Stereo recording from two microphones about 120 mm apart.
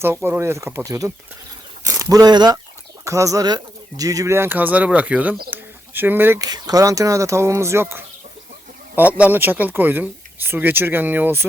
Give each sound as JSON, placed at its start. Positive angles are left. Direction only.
{"t": 0.3, "sound": "speech", "side_deg": -20}
{"t": 6.4, "sound": "speech", "side_deg": -35}